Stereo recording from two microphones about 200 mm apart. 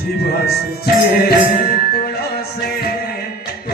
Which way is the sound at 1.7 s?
45° left (ahead or behind).